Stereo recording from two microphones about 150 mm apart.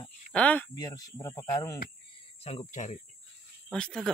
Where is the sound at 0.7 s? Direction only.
25° left (ahead or behind).